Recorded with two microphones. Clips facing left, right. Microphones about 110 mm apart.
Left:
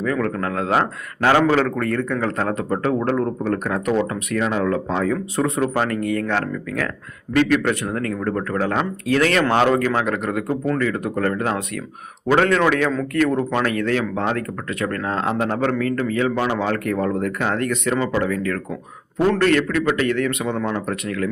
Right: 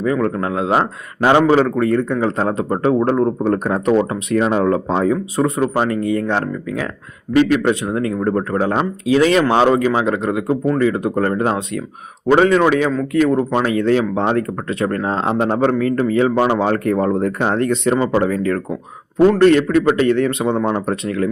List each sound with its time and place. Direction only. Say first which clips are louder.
0.0 s speech: right 4 dB; 20° right (ahead or behind)
5.1 s speech: right 3 dB; 10° right (ahead or behind)
5.8 s speech: right 4 dB; 20° right (ahead or behind)
10.4 s speech: right 4 dB; 10° right (ahead or behind)
10.8 s speech: right 5 dB; 20° right (ahead or behind)
12.4 s speech: right 4 dB; 10° right (ahead or behind); by 21.2 s 30° right (ahead or behind)